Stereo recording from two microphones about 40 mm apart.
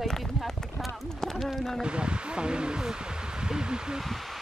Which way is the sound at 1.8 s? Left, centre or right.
Right.